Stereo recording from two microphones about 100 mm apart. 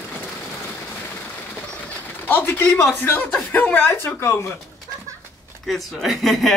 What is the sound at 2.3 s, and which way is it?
Speech, 20° left (ahead or behind).